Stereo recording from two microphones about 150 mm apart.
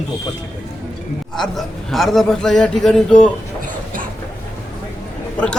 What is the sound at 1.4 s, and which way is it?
A man's voice, centre (ahead or behind).